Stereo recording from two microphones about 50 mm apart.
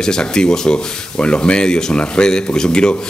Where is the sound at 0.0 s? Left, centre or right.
Centre.